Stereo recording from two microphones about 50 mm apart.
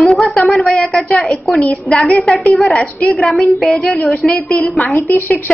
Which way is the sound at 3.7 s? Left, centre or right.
Left.